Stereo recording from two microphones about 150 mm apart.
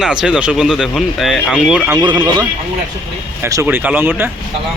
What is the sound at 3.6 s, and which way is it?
Speech, 10° right (ahead or behind).